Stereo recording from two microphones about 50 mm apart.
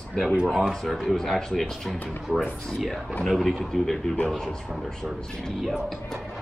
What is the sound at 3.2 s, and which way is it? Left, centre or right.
Speech, centre.